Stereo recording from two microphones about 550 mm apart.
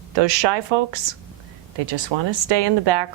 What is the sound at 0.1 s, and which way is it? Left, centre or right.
A woman's voice, right.